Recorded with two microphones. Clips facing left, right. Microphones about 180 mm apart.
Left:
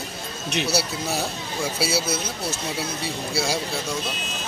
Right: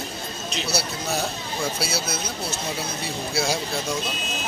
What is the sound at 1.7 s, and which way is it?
Speech, 10° left (ahead or behind).